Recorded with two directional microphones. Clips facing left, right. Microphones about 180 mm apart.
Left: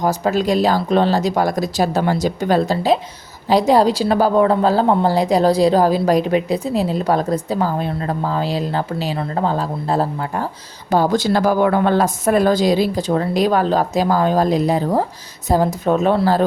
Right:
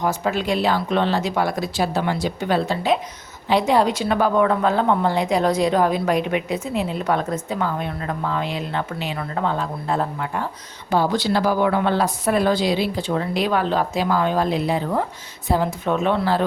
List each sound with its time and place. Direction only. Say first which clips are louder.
0.0 s a woman's voice: left 5 dB; 40° left (ahead or behind)